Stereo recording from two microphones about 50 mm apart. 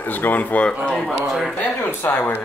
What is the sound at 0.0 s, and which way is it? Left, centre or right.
Speech, left.